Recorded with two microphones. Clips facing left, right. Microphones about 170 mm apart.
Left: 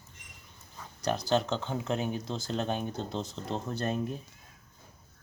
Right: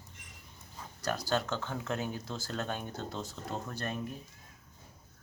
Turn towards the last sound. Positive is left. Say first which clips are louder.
# left 5 dB
turn(degrees=25)  # may be behind; listen again after turning